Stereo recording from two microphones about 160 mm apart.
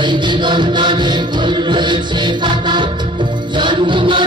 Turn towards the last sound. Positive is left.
turn(degrees=-30)  # may be behind; listen again after turning